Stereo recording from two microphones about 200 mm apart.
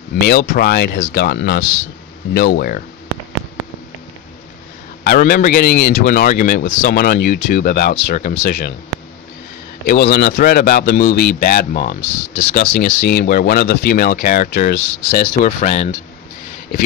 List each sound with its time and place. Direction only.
0.3 s a man's voice: 50° left (ahead or behind)
5.0 s a man's voice: 45° left (ahead or behind)
9.8 s a man's voice: 45° left (ahead or behind)